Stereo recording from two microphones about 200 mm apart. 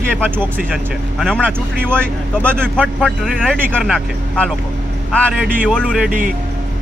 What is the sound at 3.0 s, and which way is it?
Speech, 5° left (ahead or behind).